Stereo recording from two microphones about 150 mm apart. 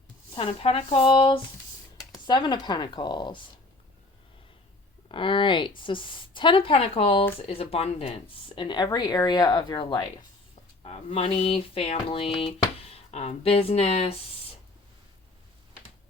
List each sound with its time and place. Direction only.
0.3 s a woman's voice: 40° left (ahead or behind)
5.0 s a woman's voice: 35° left (ahead or behind)
10.8 s a woman's voice: 40° left (ahead or behind)